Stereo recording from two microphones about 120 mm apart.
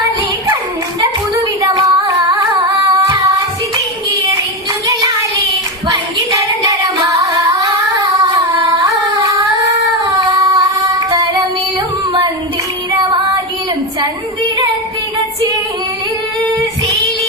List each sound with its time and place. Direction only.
1.7 s singing: 30° right (ahead or behind)
2.9 s child singing: 30° right (ahead or behind)
5.9 s child singing: 30° right (ahead or behind)
7.4 s singing: 30° right (ahead or behind)